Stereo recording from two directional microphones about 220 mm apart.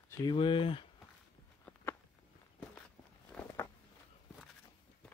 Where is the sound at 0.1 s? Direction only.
20° left (ahead or behind).